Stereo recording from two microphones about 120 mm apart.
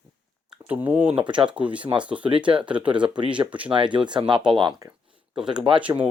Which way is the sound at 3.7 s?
40° right (ahead or behind).